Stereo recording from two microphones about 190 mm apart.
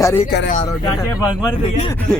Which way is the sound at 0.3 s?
60° left (ahead or behind).